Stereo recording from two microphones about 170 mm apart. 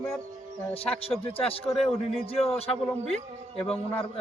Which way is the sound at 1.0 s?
35° left (ahead or behind).